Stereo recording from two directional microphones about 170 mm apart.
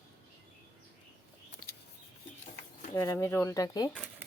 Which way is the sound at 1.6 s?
60° left (ahead or behind).